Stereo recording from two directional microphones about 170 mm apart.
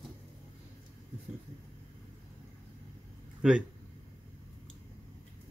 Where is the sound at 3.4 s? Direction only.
5° right (ahead or behind).